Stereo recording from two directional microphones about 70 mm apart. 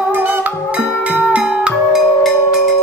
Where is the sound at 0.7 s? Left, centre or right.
Centre.